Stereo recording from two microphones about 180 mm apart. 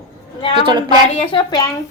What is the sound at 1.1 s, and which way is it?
Speech, 25° left (ahead or behind).